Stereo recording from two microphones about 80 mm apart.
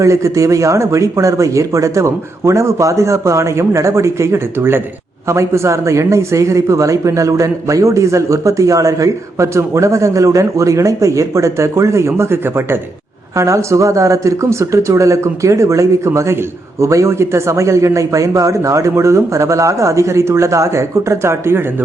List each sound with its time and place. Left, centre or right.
0.0 s speech: right